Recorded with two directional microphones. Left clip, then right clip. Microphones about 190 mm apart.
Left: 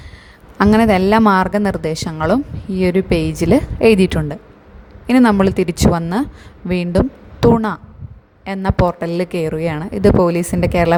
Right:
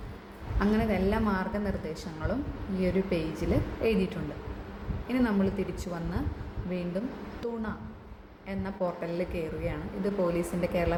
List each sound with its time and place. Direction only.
0.6 s a woman's voice: 50° left (ahead or behind)